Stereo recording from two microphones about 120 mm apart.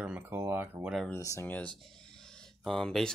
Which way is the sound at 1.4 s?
15° left (ahead or behind).